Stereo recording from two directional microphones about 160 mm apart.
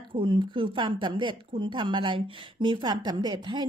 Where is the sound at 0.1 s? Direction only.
30° right (ahead or behind).